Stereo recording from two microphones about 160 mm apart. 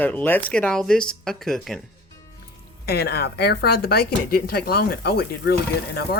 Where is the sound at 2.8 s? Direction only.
80° left.